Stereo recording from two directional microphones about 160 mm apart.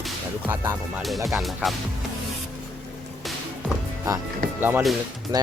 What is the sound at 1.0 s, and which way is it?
Music, centre (ahead or behind).